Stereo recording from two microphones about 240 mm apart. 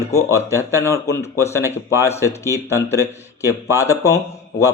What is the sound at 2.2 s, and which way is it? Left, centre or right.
Speech, centre.